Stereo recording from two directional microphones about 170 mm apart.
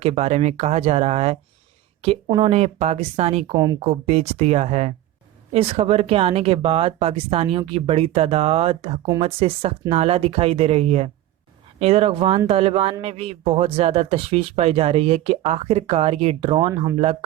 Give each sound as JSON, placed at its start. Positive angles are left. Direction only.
{"t": 0.0, "sound": "a man's voice", "side_deg": -35}